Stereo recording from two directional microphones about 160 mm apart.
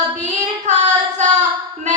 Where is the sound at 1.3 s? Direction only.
50° right (ahead or behind).